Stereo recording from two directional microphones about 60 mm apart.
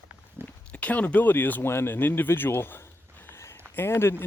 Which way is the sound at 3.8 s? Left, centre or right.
Left.